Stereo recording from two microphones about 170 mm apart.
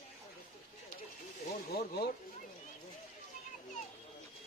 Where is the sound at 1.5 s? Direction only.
70° left (ahead or behind).